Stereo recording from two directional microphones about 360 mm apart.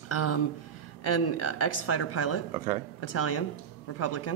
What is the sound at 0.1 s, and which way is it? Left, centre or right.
Speech, left.